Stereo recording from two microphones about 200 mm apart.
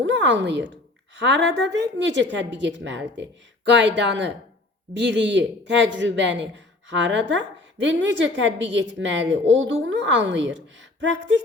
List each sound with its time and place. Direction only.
0.0 s a man's voice: 65° right (ahead or behind)